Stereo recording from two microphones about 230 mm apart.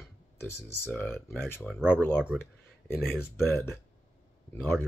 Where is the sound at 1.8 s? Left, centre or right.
Centre.